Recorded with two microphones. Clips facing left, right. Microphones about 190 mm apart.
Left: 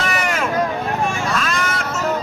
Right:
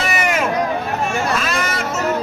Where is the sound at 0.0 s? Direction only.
5° right (ahead or behind).